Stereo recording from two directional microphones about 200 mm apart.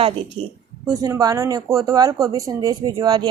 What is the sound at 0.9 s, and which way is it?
Speech, 15° right (ahead or behind).